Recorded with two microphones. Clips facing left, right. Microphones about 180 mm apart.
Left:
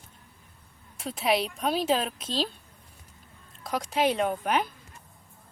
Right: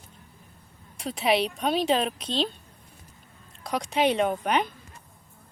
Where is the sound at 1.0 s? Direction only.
Centre (ahead or behind).